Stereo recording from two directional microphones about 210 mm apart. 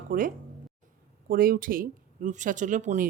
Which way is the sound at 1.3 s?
40° right (ahead or behind).